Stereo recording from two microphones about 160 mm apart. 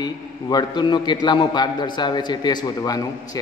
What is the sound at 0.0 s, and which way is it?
A man's voice, 25° left (ahead or behind).